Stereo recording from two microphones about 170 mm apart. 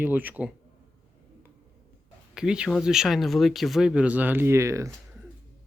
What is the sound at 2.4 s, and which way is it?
Speech, 5° right (ahead or behind).